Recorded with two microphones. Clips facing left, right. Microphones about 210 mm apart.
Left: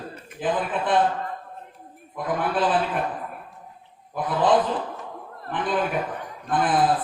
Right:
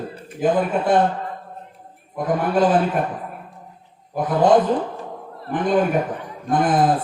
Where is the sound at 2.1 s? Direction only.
45° right (ahead or behind).